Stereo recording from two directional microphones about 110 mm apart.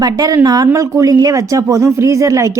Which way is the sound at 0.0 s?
35° right (ahead or behind).